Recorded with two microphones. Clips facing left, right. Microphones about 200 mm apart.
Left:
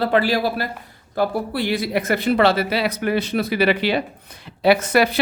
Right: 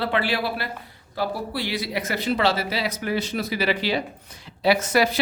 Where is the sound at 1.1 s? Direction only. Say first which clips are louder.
Left 6 dB; 50° left (ahead or behind).